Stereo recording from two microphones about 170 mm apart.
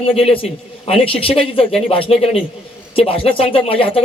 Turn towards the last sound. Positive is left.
turn(degrees=35)  # may be behind; listen again after turning